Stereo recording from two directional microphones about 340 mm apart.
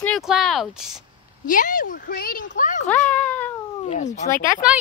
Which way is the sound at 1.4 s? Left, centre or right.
Left.